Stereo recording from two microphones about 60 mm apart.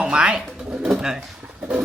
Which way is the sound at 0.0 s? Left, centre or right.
Centre.